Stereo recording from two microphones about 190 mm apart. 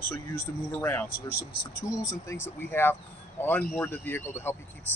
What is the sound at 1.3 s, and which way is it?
Speech, 65° left (ahead or behind).